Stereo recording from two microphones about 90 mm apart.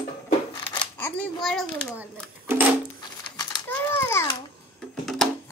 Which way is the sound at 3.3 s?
50° left (ahead or behind).